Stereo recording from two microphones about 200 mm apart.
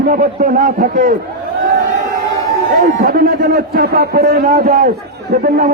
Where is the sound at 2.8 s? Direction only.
50° right (ahead or behind).